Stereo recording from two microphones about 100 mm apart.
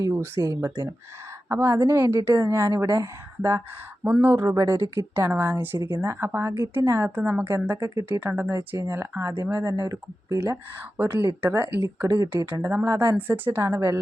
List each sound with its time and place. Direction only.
0.0 s a woman's voice: 25° right (ahead or behind)
4.0 s speech: 15° right (ahead or behind)
4.4 s a woman's voice: 30° right (ahead or behind)
7.2 s speech: 15° right (ahead or behind)
7.4 s a woman's voice: 25° right (ahead or behind)
8.2 s a woman's voice: 20° right (ahead or behind)
9.7 s a woman's voice: 40° right (ahead or behind)